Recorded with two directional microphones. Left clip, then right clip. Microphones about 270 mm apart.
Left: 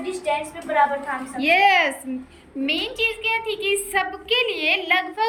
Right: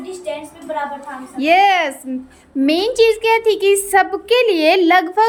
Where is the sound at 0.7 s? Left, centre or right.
Centre.